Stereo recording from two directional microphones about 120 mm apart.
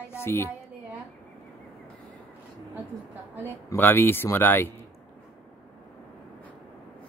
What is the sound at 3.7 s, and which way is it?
Speech, 20° left (ahead or behind).